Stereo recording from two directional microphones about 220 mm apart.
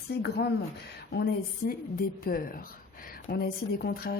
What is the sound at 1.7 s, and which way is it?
A woman's voice, 40° left (ahead or behind).